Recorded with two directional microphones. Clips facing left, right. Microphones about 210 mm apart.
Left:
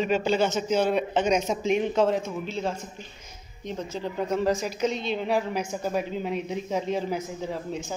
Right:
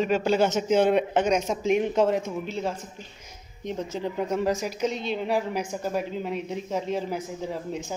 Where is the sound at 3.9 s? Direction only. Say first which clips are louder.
Left 1 dB; 15° right (ahead or behind).